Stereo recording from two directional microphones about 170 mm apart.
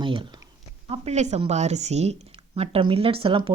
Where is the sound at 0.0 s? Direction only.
30° right (ahead or behind).